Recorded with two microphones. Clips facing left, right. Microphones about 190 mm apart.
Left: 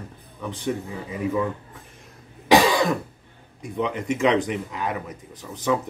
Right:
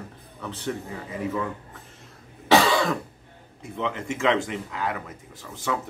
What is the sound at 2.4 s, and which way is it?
Cough, 15° left (ahead or behind).